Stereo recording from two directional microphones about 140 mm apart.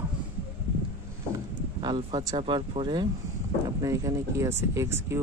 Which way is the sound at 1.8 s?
35° right (ahead or behind).